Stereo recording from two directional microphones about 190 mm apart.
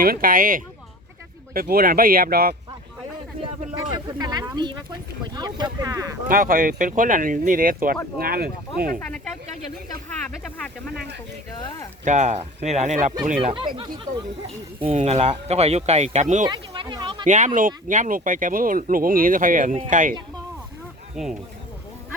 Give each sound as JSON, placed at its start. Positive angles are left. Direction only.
{"t": 0.0, "sound": "speech", "side_deg": -50}
{"t": 4.2, "sound": "speech", "side_deg": -20}
{"t": 6.2, "sound": "speech", "side_deg": -50}
{"t": 9.0, "sound": "speech", "side_deg": 5}
{"t": 11.5, "sound": "speech", "side_deg": 20}
{"t": 12.0, "sound": "speech", "side_deg": -40}
{"t": 16.5, "sound": "speech", "side_deg": -25}
{"t": 17.2, "sound": "speech", "side_deg": -40}
{"t": 21.2, "sound": "speech", "side_deg": 0}